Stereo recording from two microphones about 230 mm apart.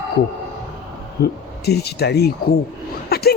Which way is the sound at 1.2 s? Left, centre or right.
Left.